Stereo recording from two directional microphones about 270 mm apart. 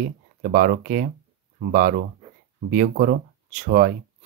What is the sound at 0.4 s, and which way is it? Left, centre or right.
Speech, right.